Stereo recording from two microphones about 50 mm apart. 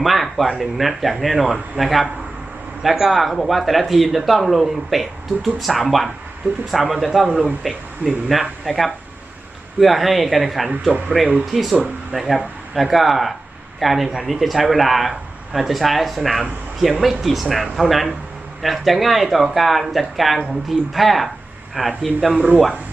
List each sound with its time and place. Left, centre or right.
0.0 s speech: centre
11.1 s speech: centre
22.4 s speech: right